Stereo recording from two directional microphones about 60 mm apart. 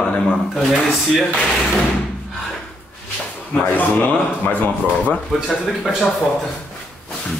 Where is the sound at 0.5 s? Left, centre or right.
Centre.